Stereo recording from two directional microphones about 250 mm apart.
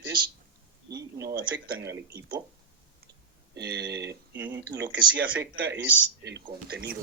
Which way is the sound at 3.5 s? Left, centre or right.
Right.